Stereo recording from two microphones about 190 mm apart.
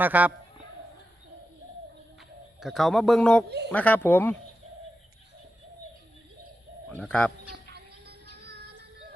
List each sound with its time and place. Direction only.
0.0 s a man's voice: 10° right (ahead or behind)
2.6 s a man's voice: centre (ahead or behind)
6.9 s a man's voice: 5° left (ahead or behind)
7.7 s music: 60° right (ahead or behind)